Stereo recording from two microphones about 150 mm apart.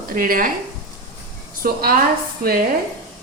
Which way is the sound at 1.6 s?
80° right.